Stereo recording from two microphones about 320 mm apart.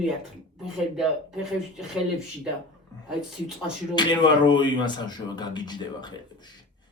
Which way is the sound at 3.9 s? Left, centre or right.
Centre.